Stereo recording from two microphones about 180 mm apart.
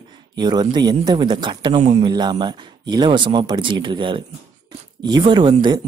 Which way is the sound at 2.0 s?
25° right (ahead or behind).